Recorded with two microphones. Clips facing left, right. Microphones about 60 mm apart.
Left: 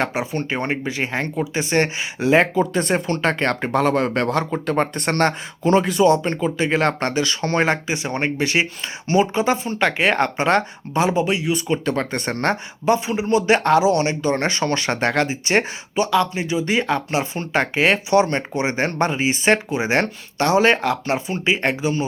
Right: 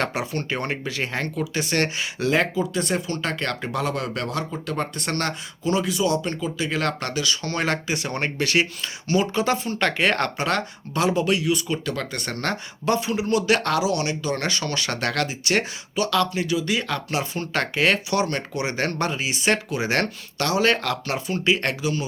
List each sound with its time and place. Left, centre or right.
0.0 s speech: centre
2.6 s speech: left